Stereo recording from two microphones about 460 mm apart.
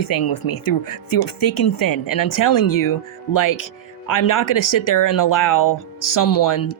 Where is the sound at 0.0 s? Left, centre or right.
Left.